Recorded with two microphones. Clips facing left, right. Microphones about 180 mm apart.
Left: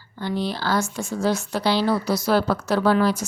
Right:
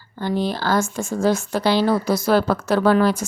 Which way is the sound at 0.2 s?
50° right (ahead or behind).